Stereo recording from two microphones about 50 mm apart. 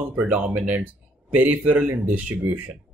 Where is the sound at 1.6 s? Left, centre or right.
Right.